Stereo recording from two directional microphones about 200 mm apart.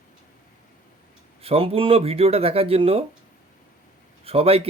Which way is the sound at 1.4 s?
30° right (ahead or behind).